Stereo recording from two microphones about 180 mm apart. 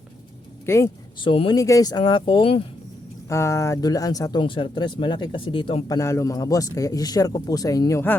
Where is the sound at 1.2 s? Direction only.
30° left (ahead or behind).